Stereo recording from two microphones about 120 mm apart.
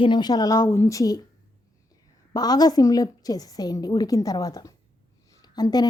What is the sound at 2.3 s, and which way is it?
A woman's voice, 35° left (ahead or behind).